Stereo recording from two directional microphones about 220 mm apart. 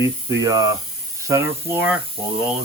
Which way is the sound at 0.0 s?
15° right (ahead or behind).